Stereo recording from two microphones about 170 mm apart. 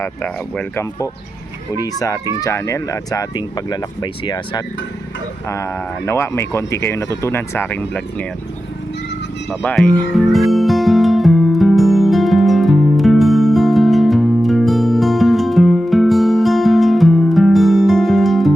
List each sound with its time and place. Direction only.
0.0 s speech: 15° left (ahead or behind)
9.5 s speech: centre (ahead or behind)
10.5 s music: centre (ahead or behind)